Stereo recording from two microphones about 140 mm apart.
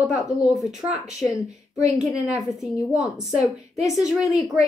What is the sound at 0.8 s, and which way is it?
Speech, 20° right (ahead or behind).